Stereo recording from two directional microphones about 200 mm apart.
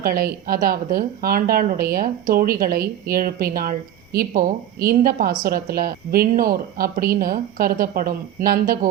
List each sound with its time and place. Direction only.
0.0 s a woman's voice: 45° right (ahead or behind)